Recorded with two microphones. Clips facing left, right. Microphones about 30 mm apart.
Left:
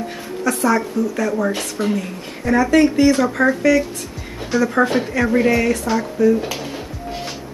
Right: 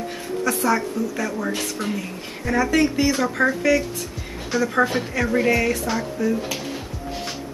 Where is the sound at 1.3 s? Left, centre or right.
Centre.